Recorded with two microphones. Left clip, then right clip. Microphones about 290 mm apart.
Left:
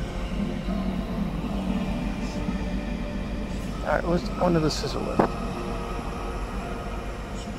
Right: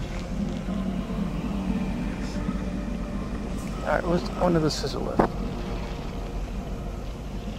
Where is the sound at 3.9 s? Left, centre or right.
Centre.